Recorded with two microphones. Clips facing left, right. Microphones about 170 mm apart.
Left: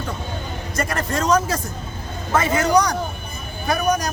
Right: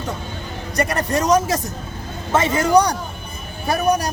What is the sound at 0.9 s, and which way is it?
Speech, 20° right (ahead or behind).